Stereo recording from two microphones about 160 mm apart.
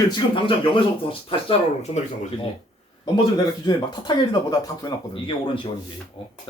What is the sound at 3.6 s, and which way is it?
Speech, 30° left (ahead or behind).